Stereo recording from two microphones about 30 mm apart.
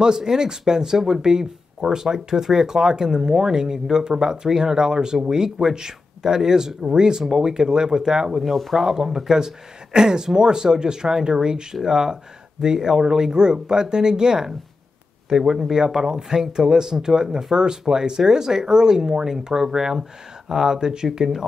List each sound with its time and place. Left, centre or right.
0.0 s speech: right